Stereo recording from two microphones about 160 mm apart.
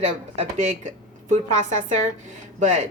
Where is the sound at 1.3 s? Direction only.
50° right (ahead or behind).